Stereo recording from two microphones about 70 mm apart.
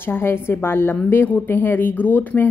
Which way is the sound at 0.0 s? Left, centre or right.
Left.